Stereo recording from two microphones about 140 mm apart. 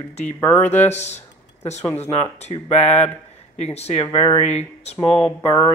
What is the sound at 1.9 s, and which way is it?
Speech, 50° left (ahead or behind).